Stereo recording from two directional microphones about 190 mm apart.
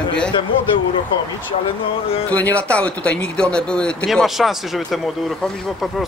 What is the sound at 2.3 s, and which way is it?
Speech, 10° left (ahead or behind).